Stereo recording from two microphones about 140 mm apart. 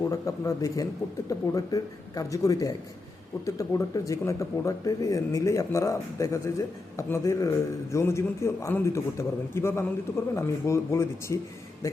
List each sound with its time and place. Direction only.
0.0 s speech: 25° left (ahead or behind)